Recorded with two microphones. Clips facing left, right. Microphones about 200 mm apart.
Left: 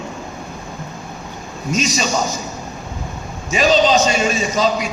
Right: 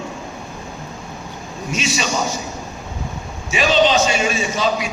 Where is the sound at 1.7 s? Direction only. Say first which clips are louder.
Left 3 dB; 40° left (ahead or behind).